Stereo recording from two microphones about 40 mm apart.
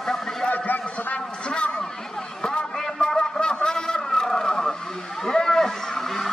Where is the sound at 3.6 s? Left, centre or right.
Centre.